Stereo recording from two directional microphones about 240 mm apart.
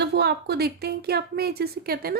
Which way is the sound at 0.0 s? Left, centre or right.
Right.